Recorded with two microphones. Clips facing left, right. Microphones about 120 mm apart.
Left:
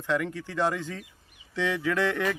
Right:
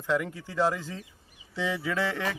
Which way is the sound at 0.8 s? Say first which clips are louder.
Left 3 dB; 35° right (ahead or behind).